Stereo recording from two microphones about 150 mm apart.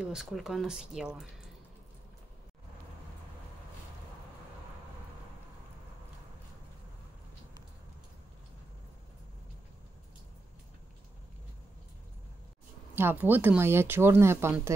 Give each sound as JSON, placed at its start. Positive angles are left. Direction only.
{"t": 0.0, "sound": "speech", "side_deg": -5}
{"t": 12.9, "sound": "speech", "side_deg": -15}